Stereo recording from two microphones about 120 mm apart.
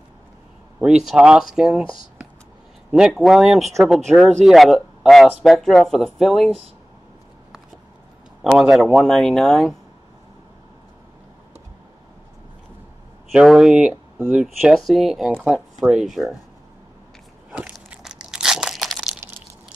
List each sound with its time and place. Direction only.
0.7 s speech: 5° right (ahead or behind)
2.9 s speech: 5° right (ahead or behind)
8.4 s speech: centre (ahead or behind)
13.3 s speech: 5° right (ahead or behind)
14.4 s speech: centre (ahead or behind)
17.5 s biting: 10° right (ahead or behind)
17.8 s crushing: 5° right (ahead or behind)